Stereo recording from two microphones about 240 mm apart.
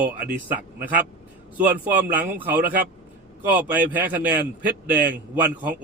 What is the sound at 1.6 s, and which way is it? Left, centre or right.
A man's voice, centre.